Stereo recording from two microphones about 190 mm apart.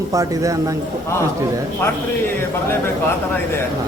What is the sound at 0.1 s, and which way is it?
Speech, 20° right (ahead or behind).